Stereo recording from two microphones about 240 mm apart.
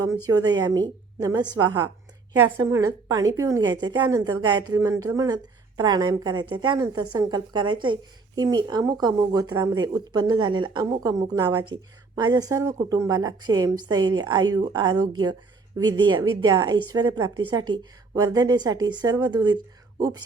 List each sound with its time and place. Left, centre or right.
0.0 s a woman's voice: centre